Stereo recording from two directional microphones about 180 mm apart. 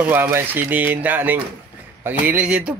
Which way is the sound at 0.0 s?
10° right (ahead or behind).